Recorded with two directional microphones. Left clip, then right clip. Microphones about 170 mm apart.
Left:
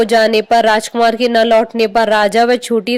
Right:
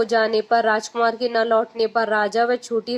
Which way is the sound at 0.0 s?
40° left (ahead or behind).